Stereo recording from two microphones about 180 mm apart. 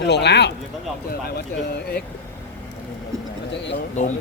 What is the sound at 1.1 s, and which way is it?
Speech, 60° left (ahead or behind).